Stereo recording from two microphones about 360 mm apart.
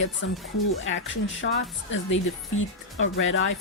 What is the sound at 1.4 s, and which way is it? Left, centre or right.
Speech, left.